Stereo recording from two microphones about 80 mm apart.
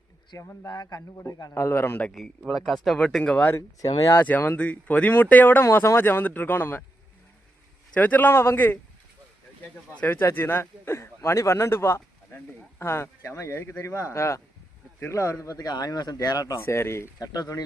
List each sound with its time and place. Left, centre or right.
0.3 s speech: left
0.7 s speech: left
1.5 s speech: left
2.5 s speech: centre
4.1 s speech: left
5.6 s speech: left
7.9 s speech: left
9.9 s speech: centre
10.2 s a man's voice: left
16.6 s speech: left
17.2 s speech: left